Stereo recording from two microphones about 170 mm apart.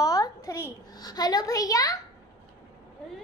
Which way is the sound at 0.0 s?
20° left (ahead or behind).